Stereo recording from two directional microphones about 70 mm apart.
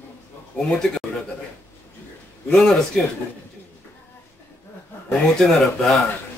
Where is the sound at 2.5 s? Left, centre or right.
Centre.